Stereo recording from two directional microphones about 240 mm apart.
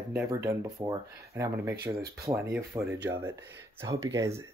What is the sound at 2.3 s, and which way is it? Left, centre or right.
Speech, centre.